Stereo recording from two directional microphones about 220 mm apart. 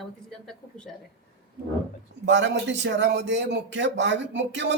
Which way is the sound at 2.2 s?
55° right (ahead or behind).